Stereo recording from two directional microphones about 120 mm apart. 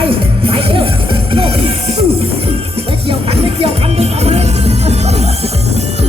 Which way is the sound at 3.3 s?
55° right (ahead or behind).